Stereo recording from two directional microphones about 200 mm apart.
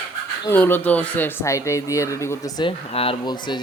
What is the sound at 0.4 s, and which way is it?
Speech, 10° left (ahead or behind).